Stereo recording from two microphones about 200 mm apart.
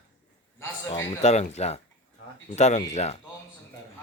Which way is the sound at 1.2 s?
35° left (ahead or behind).